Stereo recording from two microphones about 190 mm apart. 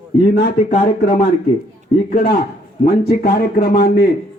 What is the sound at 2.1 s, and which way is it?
A man's voice, 55° left (ahead or behind).